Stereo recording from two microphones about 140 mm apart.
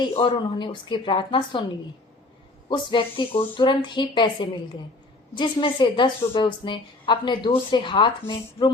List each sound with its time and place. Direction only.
0.2 s a woman's voice: 35° left (ahead or behind)
2.6 s a woman's voice: 35° left (ahead or behind)